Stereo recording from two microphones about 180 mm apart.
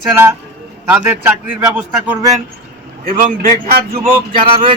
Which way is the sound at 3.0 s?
45° right (ahead or behind).